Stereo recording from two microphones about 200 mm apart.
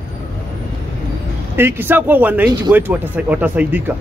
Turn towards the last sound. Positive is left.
turn(degrees=-10)  # may be behind; listen again after turning